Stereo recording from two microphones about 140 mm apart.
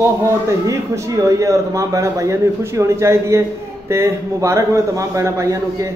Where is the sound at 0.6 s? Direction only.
20° right (ahead or behind).